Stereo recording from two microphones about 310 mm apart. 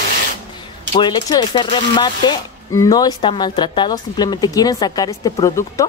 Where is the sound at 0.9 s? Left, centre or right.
Centre.